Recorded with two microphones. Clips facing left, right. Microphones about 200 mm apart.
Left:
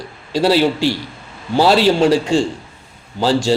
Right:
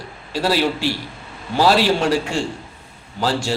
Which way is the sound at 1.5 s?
30° left (ahead or behind).